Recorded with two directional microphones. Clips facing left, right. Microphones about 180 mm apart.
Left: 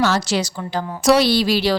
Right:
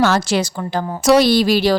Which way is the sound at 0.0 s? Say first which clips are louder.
Right 3 dB; 55° right (ahead or behind).